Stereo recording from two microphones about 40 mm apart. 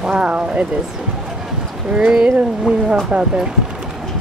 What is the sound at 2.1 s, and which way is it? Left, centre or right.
Speech, right.